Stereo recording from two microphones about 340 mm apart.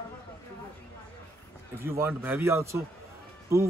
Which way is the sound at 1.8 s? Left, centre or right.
Centre.